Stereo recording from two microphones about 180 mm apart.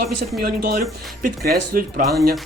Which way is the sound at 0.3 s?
55° right (ahead or behind).